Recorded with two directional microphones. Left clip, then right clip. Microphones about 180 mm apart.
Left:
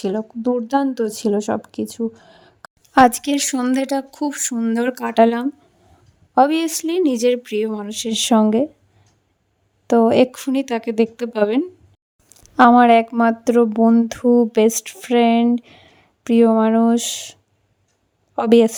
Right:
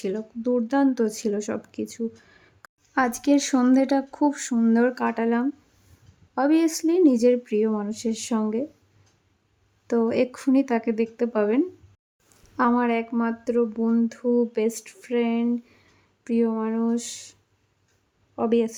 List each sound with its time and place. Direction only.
0.2 s speech: 35° left (ahead or behind)
2.9 s speech: 50° left (ahead or behind)
9.8 s speech: 45° left (ahead or behind)
18.3 s speech: 55° left (ahead or behind)